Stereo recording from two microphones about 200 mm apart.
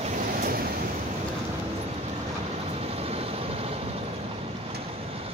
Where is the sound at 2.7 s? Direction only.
30° right (ahead or behind).